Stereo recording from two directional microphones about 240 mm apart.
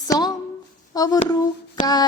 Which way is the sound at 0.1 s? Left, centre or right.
Centre.